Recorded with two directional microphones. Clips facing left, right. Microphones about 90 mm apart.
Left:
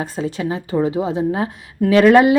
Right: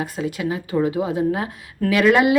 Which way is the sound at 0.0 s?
30° left (ahead or behind).